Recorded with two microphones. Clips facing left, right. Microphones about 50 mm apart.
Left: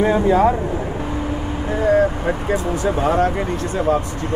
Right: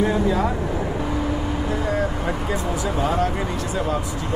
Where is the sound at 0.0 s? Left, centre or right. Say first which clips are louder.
Left 6 dB; left.